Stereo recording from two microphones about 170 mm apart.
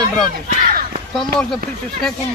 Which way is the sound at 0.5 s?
45° right (ahead or behind).